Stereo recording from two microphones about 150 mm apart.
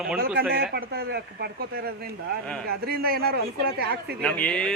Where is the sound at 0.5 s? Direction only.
90° right.